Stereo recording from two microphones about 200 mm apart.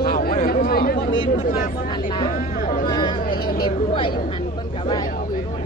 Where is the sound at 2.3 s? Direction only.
45° left (ahead or behind).